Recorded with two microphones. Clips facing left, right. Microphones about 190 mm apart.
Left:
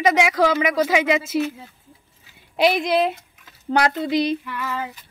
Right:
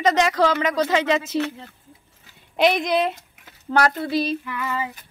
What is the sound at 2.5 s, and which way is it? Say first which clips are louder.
Speech: left 1 dB; 5° left (ahead or behind).